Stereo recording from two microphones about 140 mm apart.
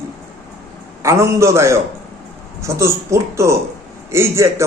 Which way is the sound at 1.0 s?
20° right (ahead or behind).